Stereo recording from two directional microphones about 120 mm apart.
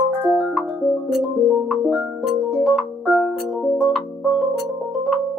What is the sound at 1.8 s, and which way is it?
Music, 5° right (ahead or behind).